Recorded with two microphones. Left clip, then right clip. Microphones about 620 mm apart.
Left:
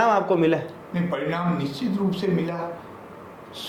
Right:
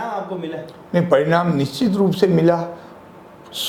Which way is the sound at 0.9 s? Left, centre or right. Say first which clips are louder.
Right 11 dB; right.